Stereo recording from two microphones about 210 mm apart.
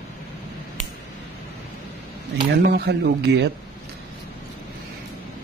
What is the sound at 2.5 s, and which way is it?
Speech, 50° right (ahead or behind).